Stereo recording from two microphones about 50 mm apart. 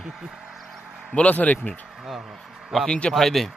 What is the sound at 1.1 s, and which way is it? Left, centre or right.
Speech, left.